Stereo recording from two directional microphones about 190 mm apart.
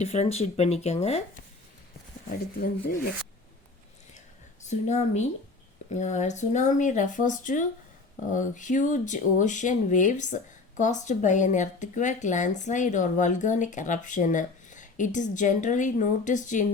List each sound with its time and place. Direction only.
0.0 s speech: 35° left (ahead or behind)
2.6 s speech: 50° left (ahead or behind)
4.7 s speech: 40° left (ahead or behind)